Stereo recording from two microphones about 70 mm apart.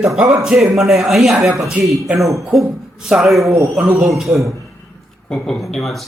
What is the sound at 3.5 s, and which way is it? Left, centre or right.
A man's voice, right.